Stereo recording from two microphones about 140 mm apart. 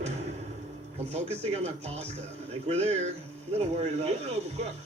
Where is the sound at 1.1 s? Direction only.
50° right (ahead or behind).